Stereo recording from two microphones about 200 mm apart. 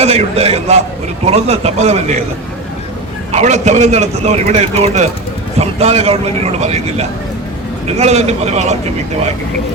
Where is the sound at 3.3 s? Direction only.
35° right (ahead or behind).